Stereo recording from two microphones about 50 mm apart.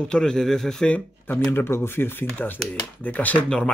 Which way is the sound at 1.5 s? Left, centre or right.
Left.